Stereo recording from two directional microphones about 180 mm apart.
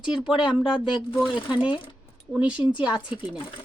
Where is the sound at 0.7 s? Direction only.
25° left (ahead or behind).